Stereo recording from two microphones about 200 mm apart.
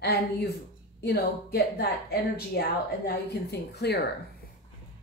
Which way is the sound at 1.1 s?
50° left (ahead or behind).